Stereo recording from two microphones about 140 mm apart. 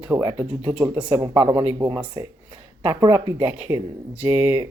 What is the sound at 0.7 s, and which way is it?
Speech, 15° right (ahead or behind).